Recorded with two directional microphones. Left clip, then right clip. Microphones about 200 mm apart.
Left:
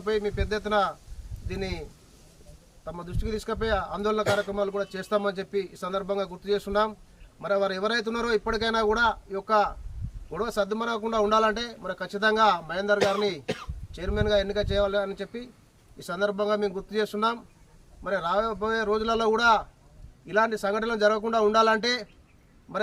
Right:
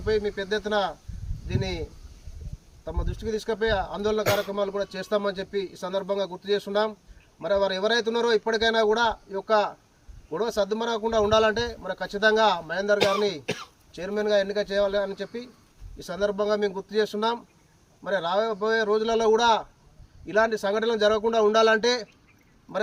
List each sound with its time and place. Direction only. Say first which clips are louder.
0.0 s a man's voice: right 2 dB; 5° left (ahead or behind)
3.2 s a man's voice: right 4 dB; 5° left (ahead or behind)
13.4 s speech: right 1 dB; 45° right (ahead or behind)
13.9 s a man's voice: right 1 dB; 5° left (ahead or behind)